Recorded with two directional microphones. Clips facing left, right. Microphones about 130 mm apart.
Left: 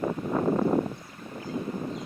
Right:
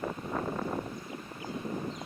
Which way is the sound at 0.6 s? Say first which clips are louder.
Left 10 dB; 45° left (ahead or behind).